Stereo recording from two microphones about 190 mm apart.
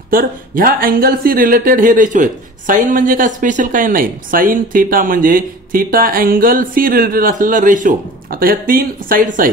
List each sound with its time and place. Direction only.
0.1 s speech: 50° right (ahead or behind)